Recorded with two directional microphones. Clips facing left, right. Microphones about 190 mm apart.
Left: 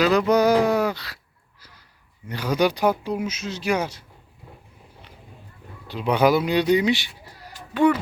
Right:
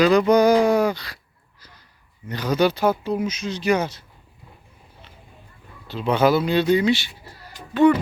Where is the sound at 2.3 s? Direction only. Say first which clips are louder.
Right 1 dB; 10° left (ahead or behind).